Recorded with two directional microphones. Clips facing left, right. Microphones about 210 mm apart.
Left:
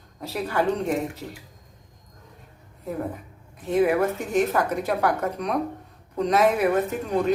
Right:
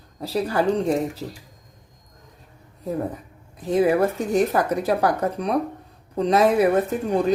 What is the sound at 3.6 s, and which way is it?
Speech, 35° right (ahead or behind).